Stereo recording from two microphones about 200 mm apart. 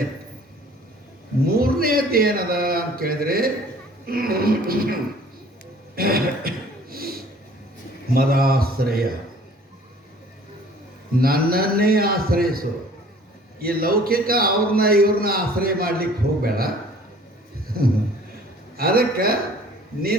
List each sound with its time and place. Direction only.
1.5 s a man's voice: 50° right (ahead or behind)
6.0 s a man's voice: 50° right (ahead or behind)
6.9 s a sound: 50° right (ahead or behind)
8.0 s a man's voice: 50° right (ahead or behind)
11.2 s a man's voice: 50° right (ahead or behind)
17.7 s a man's voice: 50° right (ahead or behind)